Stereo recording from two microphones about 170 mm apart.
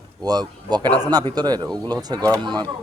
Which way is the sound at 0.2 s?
25° right (ahead or behind).